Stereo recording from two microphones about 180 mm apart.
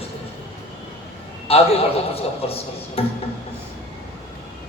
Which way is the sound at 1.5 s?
35° left (ahead or behind).